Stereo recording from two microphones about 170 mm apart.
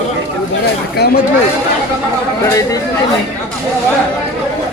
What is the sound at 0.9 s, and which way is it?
Speech, 65° left (ahead or behind).